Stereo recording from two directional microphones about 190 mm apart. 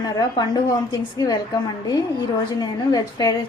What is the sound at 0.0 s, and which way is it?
A woman's voice, 20° left (ahead or behind).